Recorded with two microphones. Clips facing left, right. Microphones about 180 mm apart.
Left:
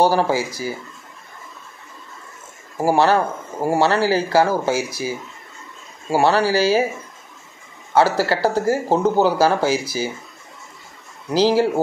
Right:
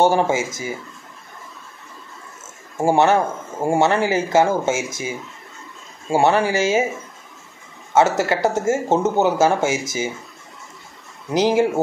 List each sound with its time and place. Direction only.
0.0 s speech: 20° right (ahead or behind)
2.8 s speech: 25° right (ahead or behind)
6.1 s speech: 20° right (ahead or behind)
7.9 s speech: 20° right (ahead or behind)
11.3 s speech: 20° right (ahead or behind)